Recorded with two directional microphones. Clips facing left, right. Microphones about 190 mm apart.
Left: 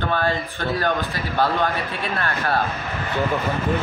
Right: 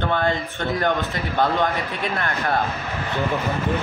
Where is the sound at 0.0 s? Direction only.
20° right (ahead or behind).